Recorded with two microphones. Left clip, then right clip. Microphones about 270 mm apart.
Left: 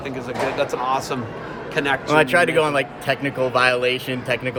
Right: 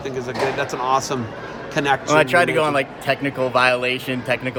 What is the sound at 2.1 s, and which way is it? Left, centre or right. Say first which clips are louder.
Speech: even; centre.